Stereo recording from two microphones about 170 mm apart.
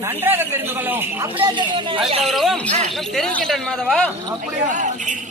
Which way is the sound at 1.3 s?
30° right (ahead or behind).